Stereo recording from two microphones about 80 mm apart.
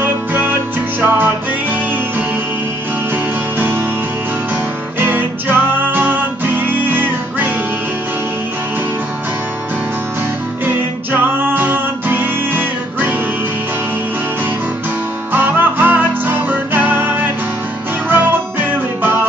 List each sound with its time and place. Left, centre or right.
0.0 s music: right
3.5 s music: right
4.9 s music: right
10.6 s music: right
15.3 s music: right